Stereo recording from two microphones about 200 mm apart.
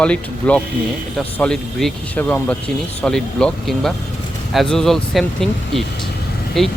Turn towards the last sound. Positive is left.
turn(degrees=0)  # may be behind; listen again after turning